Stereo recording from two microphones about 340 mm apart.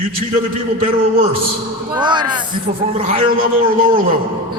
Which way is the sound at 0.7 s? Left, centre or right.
Centre.